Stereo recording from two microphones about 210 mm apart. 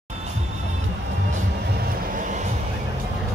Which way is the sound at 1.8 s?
40° right (ahead or behind).